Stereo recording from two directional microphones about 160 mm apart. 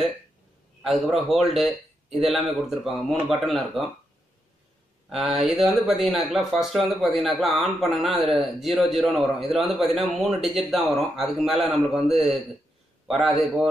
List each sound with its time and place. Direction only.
0.8 s a man's voice: centre (ahead or behind)
5.6 s a man's voice: centre (ahead or behind)